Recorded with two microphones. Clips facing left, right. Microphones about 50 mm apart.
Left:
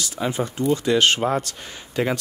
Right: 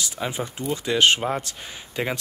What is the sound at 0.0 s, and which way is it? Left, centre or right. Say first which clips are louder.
Speech: left 4 dB; centre.